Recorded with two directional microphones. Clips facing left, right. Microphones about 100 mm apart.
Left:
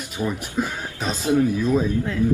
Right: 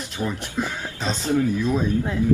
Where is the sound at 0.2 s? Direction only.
15° left (ahead or behind).